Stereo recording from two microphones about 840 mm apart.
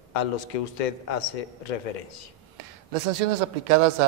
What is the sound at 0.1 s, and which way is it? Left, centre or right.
A man's voice, left.